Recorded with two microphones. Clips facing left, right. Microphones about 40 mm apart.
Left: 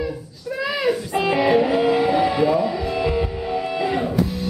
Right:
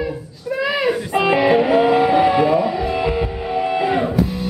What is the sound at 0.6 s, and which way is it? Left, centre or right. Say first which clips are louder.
Music: right 2 dB; centre.